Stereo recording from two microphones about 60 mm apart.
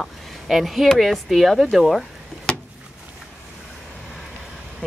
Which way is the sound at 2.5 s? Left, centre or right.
Centre.